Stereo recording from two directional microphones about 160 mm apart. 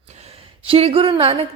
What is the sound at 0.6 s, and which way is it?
Speech, 35° right (ahead or behind).